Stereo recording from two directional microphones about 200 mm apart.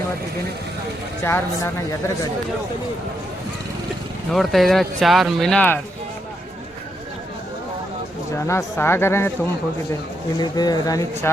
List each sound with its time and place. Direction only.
1.2 s speech: 10° left (ahead or behind)
4.3 s speech: centre (ahead or behind)
8.4 s speech: 10° left (ahead or behind)
10.3 s speech: 20° left (ahead or behind)